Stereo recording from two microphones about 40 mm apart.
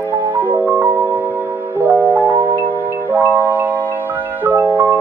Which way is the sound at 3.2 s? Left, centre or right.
Right.